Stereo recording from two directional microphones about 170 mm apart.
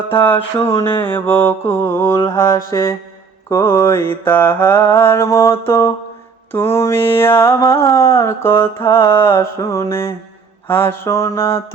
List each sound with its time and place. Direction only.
0.8 s mantra: 10° left (ahead or behind)